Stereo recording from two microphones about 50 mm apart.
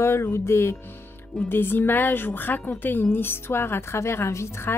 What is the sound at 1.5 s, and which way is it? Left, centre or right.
Speech, left.